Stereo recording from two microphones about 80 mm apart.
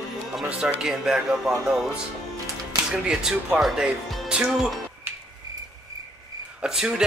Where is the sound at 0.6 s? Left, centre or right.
Centre.